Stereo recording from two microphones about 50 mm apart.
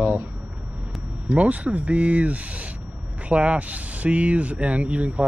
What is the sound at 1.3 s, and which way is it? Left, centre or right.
Speech, right.